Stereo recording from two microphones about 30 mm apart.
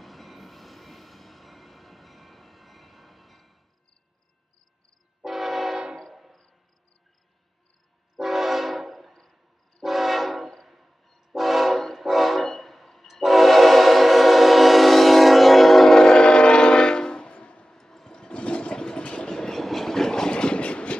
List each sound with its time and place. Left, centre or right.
0.0 s train: centre
5.2 s train: centre
8.2 s train: centre
16.0 s train: left
17.3 s music: left
17.6 s train: centre
18.2 s toilet flush: left
18.8 s vehicle: left
19.3 s train: centre
20.2 s train: left